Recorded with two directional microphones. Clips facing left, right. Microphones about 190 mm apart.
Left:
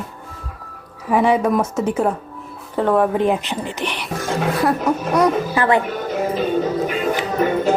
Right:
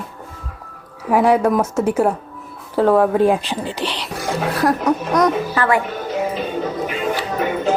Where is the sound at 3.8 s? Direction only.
10° left (ahead or behind).